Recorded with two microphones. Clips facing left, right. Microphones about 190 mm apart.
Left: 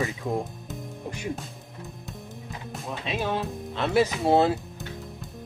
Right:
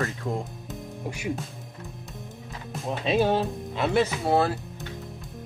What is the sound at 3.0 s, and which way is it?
Speech, 35° right (ahead or behind).